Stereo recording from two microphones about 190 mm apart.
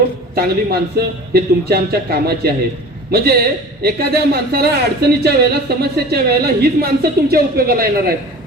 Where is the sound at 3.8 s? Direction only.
55° right (ahead or behind).